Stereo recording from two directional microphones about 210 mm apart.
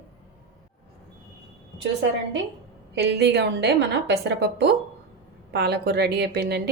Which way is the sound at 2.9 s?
50° right (ahead or behind).